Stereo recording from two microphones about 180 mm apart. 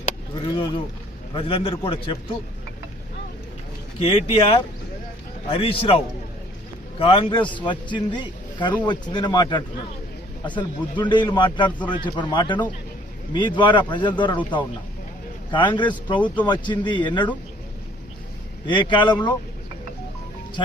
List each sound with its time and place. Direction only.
0.4 s a sound: 25° left (ahead or behind)
1.3 s a man's voice: 30° left (ahead or behind)
4.0 s a man's voice: 30° left (ahead or behind)
7.0 s a man's voice: 30° left (ahead or behind)
18.6 s a man's voice: 25° left (ahead or behind)